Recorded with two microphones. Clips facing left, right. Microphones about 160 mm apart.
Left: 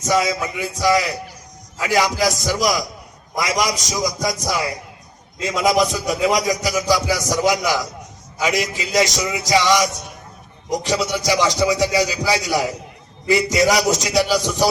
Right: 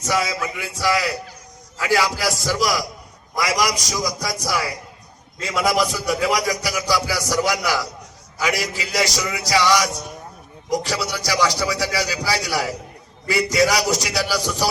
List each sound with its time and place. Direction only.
0.0 s a man's voice: 20° left (ahead or behind)